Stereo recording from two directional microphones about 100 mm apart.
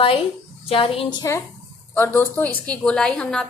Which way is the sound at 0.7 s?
75° left (ahead or behind).